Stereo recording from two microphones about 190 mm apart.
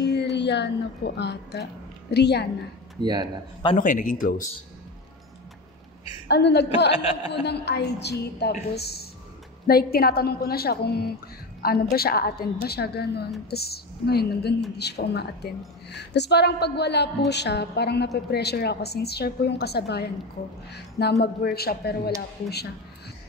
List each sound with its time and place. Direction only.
0.0 s speech: 60° left (ahead or behind)
3.0 s a man's voice: 25° right (ahead or behind)
3.7 s a woman's voice: 45° left (ahead or behind)
6.2 s a woman's voice: 60° left (ahead or behind)
6.9 s speech: 30° left (ahead or behind)
7.4 s a woman's voice: 60° left (ahead or behind)